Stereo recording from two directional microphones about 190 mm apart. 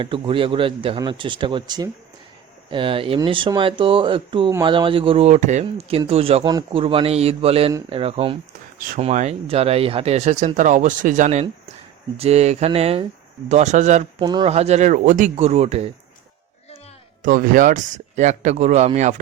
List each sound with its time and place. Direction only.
0.0 s speech: 30° right (ahead or behind)
14.2 s speech: 25° right (ahead or behind)
17.2 s speech: 45° right (ahead or behind)